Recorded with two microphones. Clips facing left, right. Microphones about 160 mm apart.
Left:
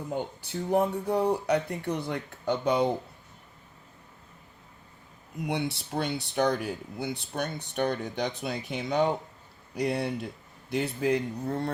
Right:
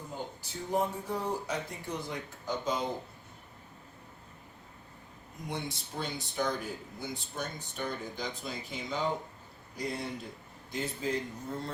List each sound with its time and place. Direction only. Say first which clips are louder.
0.4 s speech: left 5 dB; 65° left (ahead or behind)
5.5 s speech: left 7 dB; 70° left (ahead or behind)